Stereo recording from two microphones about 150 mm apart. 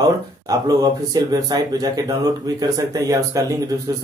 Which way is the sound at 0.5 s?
25° right (ahead or behind).